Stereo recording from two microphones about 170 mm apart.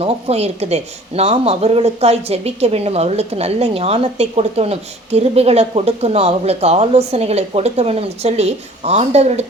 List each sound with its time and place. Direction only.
0.0 s speech: 35° right (ahead or behind)